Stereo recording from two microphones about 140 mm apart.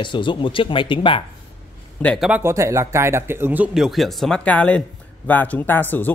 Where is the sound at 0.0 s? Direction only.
35° left (ahead or behind).